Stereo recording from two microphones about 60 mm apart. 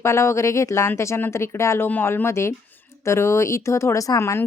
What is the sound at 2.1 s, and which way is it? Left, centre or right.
Speech, left.